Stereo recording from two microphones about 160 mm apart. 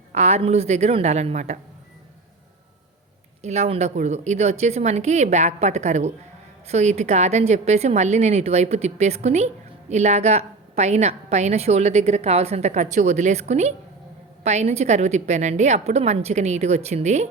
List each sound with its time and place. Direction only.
0.1 s a woman's voice: 45° right (ahead or behind)
3.4 s a woman's voice: 45° right (ahead or behind)